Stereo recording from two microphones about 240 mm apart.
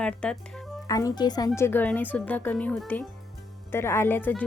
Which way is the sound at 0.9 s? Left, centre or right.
Centre.